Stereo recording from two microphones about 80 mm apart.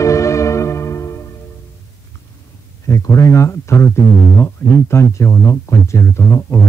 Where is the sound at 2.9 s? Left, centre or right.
Left.